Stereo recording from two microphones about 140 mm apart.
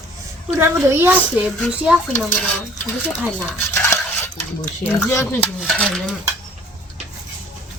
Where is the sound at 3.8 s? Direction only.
15° left (ahead or behind).